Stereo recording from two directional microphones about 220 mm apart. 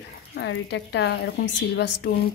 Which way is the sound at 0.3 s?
50° left (ahead or behind).